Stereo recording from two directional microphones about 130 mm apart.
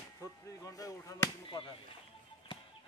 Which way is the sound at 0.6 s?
25° left (ahead or behind).